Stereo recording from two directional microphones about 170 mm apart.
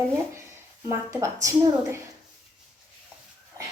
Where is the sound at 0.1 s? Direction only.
15° right (ahead or behind).